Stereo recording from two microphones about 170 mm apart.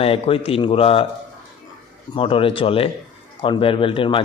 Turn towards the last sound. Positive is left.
turn(degrees=30)  # may be behind; listen again after turning